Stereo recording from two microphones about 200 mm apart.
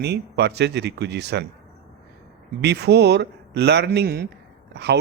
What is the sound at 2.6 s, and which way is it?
A man's voice, 55° right (ahead or behind).